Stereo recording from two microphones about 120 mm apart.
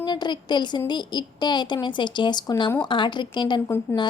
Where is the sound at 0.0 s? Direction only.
35° left (ahead or behind).